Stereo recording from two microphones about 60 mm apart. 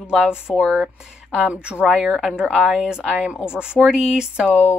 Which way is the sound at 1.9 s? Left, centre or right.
Centre.